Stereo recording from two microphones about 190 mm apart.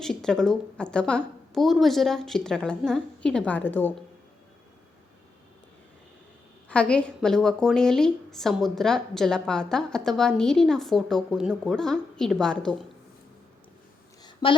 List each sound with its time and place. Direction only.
0.0 s a woman's voice: 5° left (ahead or behind)
6.7 s a woman's voice: 5° left (ahead or behind)